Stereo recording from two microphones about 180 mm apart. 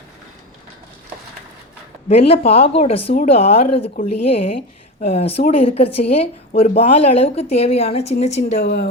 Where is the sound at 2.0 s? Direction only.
35° left (ahead or behind).